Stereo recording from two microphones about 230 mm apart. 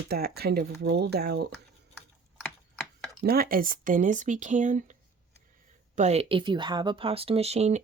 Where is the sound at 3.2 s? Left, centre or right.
Right.